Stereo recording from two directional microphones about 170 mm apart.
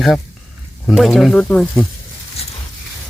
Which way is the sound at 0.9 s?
Centre (ahead or behind).